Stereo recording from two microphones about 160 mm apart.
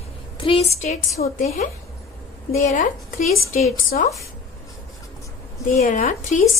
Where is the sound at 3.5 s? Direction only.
55° left (ahead or behind).